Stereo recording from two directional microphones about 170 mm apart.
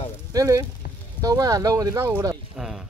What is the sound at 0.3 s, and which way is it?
Speech, 20° right (ahead or behind).